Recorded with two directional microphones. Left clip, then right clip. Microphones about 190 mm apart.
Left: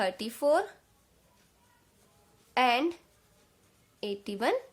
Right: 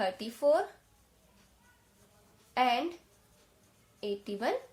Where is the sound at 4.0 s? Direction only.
50° left (ahead or behind).